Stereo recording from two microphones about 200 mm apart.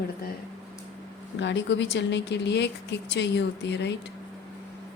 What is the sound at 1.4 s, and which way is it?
Speech, 65° left (ahead or behind).